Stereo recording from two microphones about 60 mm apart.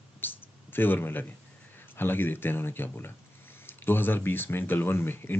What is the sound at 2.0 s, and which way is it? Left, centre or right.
Speech, left.